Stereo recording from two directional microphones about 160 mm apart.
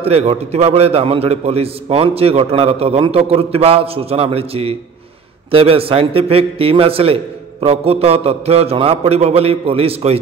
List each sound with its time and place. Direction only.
0.0 s a man's voice: 40° right (ahead or behind)